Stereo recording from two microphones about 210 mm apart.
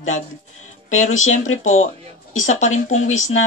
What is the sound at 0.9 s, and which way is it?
Speech, 35° left (ahead or behind).